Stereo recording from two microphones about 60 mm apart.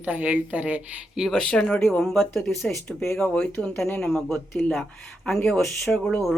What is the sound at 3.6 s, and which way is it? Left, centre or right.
Speech, centre.